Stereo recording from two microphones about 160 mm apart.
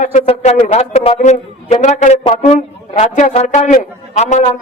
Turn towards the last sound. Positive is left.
turn(degrees=45)  # may be behind; listen again after turning